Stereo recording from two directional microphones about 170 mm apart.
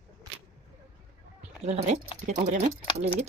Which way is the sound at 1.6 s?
40° right (ahead or behind).